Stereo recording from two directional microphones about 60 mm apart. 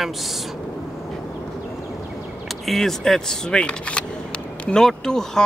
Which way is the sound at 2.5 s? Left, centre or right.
Centre.